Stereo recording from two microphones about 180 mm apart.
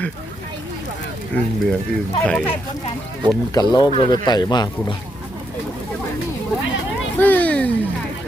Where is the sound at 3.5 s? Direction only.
25° left (ahead or behind).